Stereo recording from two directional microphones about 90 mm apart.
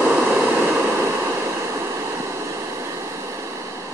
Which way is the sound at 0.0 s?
15° right (ahead or behind).